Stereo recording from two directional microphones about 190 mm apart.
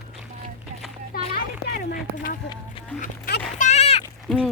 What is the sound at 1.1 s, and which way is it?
Children playing, 50° left (ahead or behind).